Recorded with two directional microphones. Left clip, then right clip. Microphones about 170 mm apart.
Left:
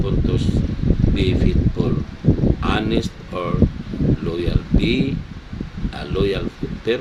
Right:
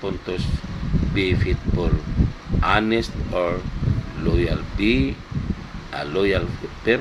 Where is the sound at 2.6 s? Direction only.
10° right (ahead or behind).